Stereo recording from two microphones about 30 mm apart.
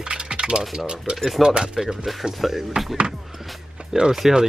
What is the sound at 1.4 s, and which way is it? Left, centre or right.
Speech, right.